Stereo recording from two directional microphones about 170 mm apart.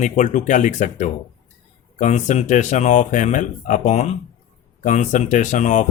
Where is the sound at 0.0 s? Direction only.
45° left (ahead or behind).